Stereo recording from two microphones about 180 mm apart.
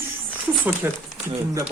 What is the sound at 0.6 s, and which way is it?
A man's voice, 10° right (ahead or behind).